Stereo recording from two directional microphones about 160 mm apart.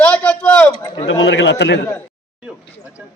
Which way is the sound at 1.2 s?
90° left.